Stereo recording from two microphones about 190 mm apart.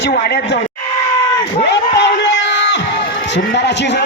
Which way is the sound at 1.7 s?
65° left (ahead or behind).